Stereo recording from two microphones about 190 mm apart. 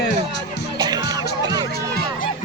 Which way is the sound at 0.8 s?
20° right (ahead or behind).